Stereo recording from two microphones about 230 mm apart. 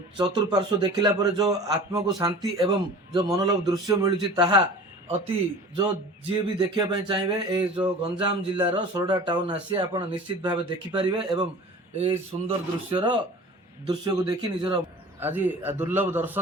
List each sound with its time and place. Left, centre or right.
0.2 s a man's voice: centre